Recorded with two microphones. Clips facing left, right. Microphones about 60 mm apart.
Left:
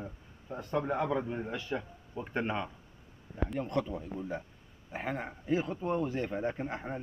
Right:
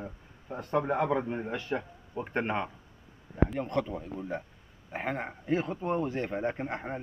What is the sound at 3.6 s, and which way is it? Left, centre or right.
Speech, right.